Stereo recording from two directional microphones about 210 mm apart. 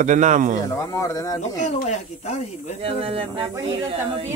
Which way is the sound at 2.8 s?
25° right (ahead or behind).